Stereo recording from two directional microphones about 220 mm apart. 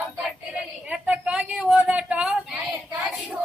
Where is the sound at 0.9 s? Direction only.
5° right (ahead or behind).